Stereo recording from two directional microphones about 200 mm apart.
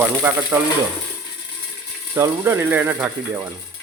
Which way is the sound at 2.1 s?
15° right (ahead or behind).